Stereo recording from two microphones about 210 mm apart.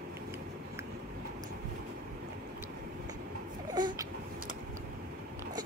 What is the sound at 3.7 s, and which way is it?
Baby cry, 20° right (ahead or behind).